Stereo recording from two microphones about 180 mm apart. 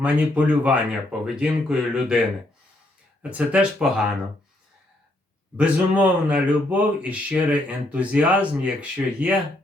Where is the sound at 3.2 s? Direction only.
5° right (ahead or behind).